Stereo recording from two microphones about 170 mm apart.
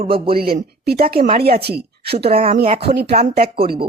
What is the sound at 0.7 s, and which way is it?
Speech, 65° right (ahead or behind).